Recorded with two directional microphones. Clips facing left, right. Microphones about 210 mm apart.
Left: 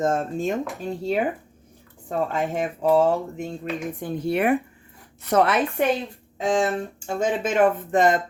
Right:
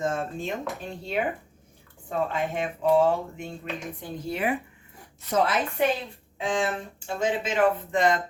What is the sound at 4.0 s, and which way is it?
Speech, 65° left (ahead or behind).